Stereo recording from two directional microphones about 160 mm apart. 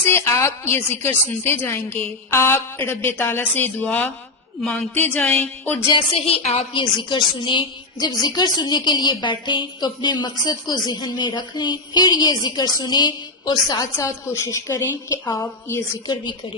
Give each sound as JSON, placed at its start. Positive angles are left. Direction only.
{"t": 0.0, "sound": "a woman's voice", "side_deg": 15}
{"t": 5.9, "sound": "speech", "side_deg": 35}
{"t": 6.9, "sound": "a woman's voice", "side_deg": 30}